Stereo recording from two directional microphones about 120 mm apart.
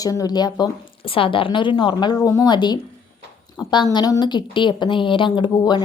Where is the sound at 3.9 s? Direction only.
35° left (ahead or behind).